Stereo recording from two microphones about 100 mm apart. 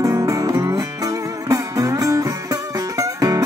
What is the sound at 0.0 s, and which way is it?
Music, 35° right (ahead or behind).